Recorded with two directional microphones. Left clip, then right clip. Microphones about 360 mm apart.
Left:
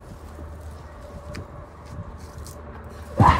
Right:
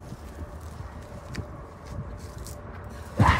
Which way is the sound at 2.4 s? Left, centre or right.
Centre.